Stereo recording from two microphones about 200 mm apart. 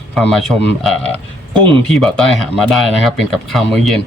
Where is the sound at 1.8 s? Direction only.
Centre (ahead or behind).